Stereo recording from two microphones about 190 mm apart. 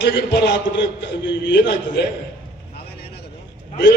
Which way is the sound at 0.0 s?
65° left (ahead or behind).